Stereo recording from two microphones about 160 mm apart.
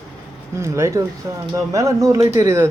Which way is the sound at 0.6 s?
15° right (ahead or behind).